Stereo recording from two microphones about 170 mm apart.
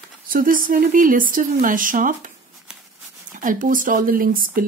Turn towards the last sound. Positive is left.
turn(degrees=-55)  # may be behind; listen again after turning